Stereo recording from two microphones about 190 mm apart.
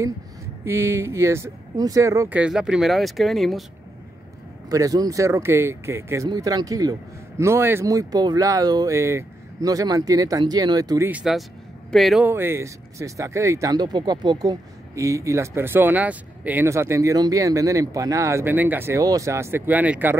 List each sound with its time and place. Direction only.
0.7 s speech: 15° right (ahead or behind)
4.6 s speech: 20° right (ahead or behind)
11.1 s a man's voice: 5° right (ahead or behind)
12.3 s speech: 10° right (ahead or behind)